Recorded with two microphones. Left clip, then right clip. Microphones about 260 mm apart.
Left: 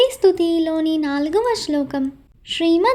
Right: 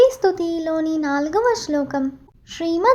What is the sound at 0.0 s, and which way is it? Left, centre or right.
A woman's voice, left.